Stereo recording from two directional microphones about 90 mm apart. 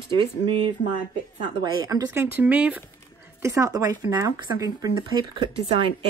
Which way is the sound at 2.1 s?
20° right (ahead or behind).